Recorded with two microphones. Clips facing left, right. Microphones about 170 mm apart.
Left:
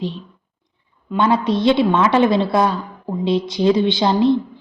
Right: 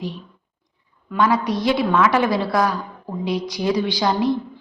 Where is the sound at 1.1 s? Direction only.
25° left (ahead or behind).